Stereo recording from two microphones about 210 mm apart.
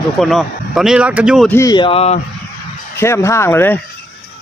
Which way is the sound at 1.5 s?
15° left (ahead or behind).